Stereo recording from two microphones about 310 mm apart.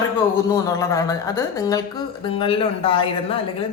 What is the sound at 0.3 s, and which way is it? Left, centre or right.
A woman's voice, centre.